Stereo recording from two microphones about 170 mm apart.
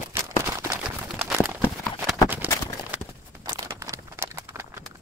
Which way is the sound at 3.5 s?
20° right (ahead or behind).